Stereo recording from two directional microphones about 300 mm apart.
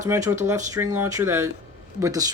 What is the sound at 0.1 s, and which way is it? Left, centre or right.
Speech, centre.